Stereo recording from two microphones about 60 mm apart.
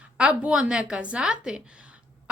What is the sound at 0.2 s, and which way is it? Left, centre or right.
A woman's voice, right.